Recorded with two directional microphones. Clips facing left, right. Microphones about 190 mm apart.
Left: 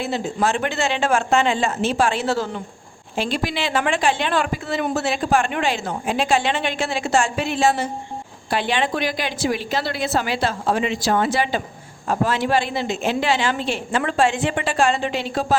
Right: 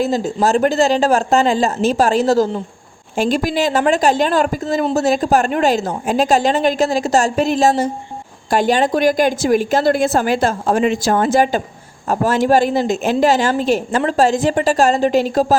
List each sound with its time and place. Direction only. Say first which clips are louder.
0.4 s a woman's voice: right 8 dB; 40° right (ahead or behind)